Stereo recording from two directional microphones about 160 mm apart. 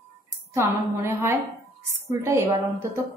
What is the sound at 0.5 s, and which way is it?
Speech, 15° right (ahead or behind).